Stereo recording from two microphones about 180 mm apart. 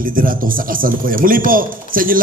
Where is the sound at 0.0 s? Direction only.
50° right (ahead or behind).